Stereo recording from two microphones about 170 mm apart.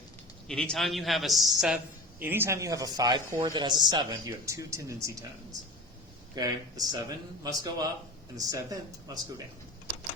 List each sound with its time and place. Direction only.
0.4 s a man's voice: 5° left (ahead or behind); by 9.1 s 20° right (ahead or behind)